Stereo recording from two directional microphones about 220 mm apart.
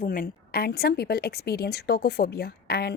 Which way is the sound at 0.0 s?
40° left (ahead or behind).